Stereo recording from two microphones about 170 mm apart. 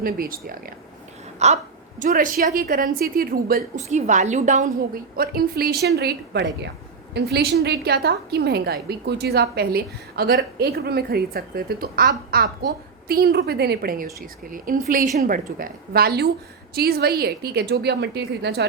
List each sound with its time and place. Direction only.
0.0 s a woman's voice: 60° right (ahead or behind)
1.4 s a woman's voice: 40° right (ahead or behind); by 3.6 s 60° right (ahead or behind)
3.8 s a woman's voice: 45° right (ahead or behind)
5.1 s a woman's voice: 60° right (ahead or behind); by 6.7 s 85° right
7.1 s a woman's voice: 75° right (ahead or behind)